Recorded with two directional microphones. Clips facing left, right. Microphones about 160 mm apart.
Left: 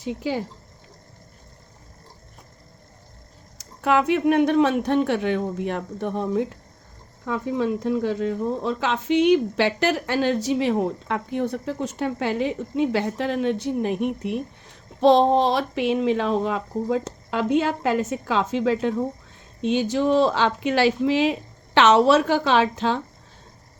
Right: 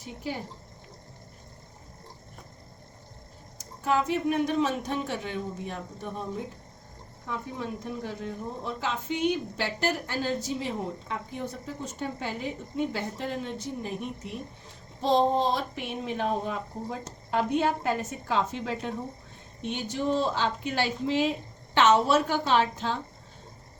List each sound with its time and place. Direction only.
0.0 s speech: 90° left
3.6 s speech: 80° left
7.3 s speech: 90° left